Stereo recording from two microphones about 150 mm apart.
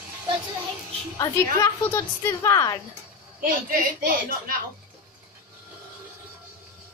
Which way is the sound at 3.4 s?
70° right (ahead or behind).